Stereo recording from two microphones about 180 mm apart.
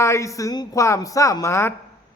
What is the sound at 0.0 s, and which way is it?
A man's voice, 15° left (ahead or behind).